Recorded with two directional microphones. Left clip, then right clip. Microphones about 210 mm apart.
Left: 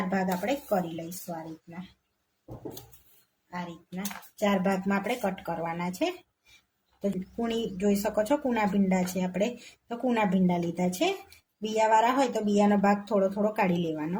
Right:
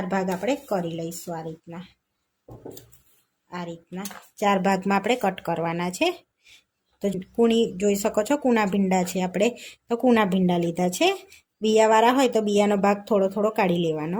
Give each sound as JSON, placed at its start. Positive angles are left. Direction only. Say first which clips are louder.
{"t": 0.1, "sound": "speech", "louder": "right 6 dB", "side_deg": -50}
{"t": 3.5, "sound": "speech", "louder": "right 4 dB", "side_deg": -50}